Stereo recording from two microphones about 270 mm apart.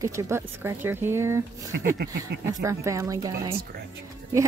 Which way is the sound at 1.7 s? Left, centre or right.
Right.